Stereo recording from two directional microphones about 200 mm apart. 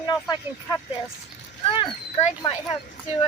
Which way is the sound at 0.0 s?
20° left (ahead or behind).